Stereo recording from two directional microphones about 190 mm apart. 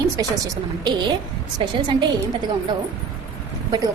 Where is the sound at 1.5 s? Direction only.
25° right (ahead or behind).